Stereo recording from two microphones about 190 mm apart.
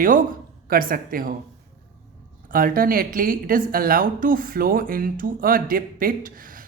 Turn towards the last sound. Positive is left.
turn(degrees=-45)  # may be behind; listen again after turning